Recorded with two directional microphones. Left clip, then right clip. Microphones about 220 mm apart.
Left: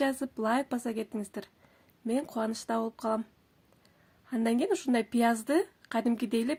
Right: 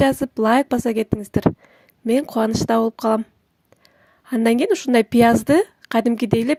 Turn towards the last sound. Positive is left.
turn(degrees=-40)  # may be behind; listen again after turning